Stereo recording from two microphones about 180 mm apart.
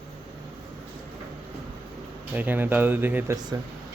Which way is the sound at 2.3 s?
10° right (ahead or behind).